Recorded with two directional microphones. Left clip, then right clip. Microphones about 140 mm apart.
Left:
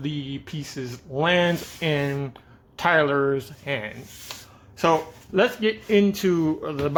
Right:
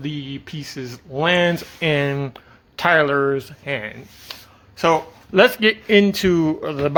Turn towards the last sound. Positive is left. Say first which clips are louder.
# right 4 dB
turn(degrees=-30)  # may be behind; listen again after turning